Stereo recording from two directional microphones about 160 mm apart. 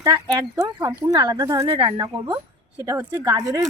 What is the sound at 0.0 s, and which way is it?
Speech, 25° right (ahead or behind).